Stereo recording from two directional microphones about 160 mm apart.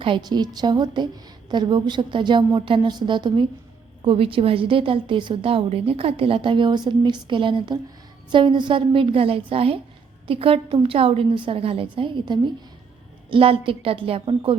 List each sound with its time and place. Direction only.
0.0 s a woman's voice: 30° right (ahead or behind)